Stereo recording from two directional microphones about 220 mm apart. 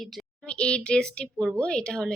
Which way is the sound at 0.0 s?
Centre (ahead or behind).